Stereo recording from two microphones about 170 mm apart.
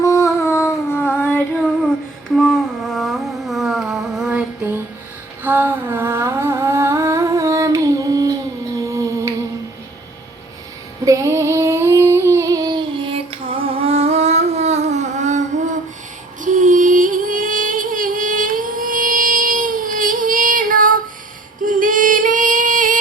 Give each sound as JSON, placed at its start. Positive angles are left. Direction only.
{"t": 0.0, "sound": "a sound", "side_deg": 20}
{"t": 1.5, "sound": "female singing", "side_deg": 5}
{"t": 2.3, "sound": "humming", "side_deg": 0}
{"t": 11.0, "sound": "a sound", "side_deg": -20}
{"t": 16.4, "sound": "music", "side_deg": -50}
{"t": 21.6, "sound": "singing", "side_deg": -55}